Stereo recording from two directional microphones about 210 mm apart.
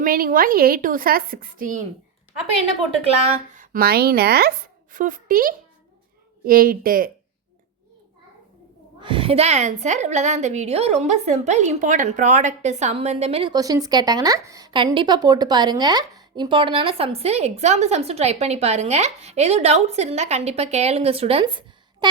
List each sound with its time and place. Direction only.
0.0 s a woman's voice: 40° right (ahead or behind)
3.0 s a woman's voice: 30° right (ahead or behind)
9.0 s a woman's voice: 25° right (ahead or behind)